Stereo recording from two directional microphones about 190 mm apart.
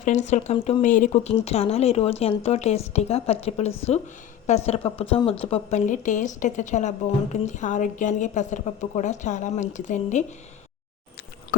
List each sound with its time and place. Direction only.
0.0 s speech: 40° left (ahead or behind)